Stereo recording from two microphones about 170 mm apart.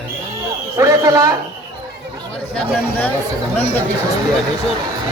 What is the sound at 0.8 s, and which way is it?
Speech, 20° right (ahead or behind).